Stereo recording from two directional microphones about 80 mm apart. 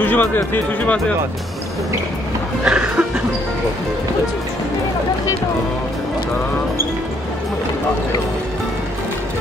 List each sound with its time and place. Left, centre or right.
0.0 s speech: left
2.6 s music: centre